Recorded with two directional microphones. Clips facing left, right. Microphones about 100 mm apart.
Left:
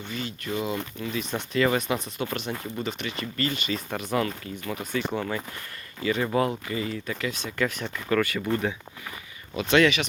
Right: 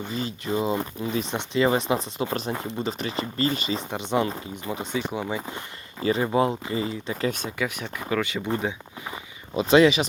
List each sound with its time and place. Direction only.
0.1 s speech: 30° right (ahead or behind)
4.9 s speech: 10° right (ahead or behind)
5.5 s speech: 30° right (ahead or behind)
7.3 s speech: 50° right (ahead or behind)
7.6 s speech: 10° right (ahead or behind)
9.6 s speech: 30° right (ahead or behind)